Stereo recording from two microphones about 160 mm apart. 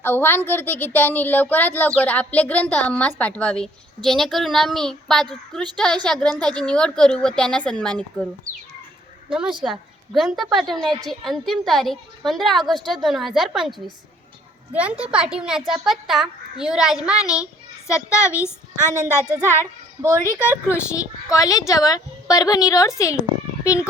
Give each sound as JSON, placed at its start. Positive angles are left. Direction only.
{"t": 0.0, "sound": "a woman's voice", "side_deg": 15}
{"t": 8.5, "sound": "speech", "side_deg": -55}
{"t": 9.3, "sound": "a woman's voice", "side_deg": -5}
{"t": 17.8, "sound": "a woman's voice", "side_deg": 20}
{"t": 19.5, "sound": "a child's voice", "side_deg": -15}
{"t": 20.4, "sound": "a woman's voice", "side_deg": 15}